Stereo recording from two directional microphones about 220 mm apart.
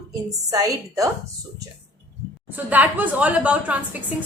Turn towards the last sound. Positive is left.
turn(degrees=-5)  # may be behind; listen again after turning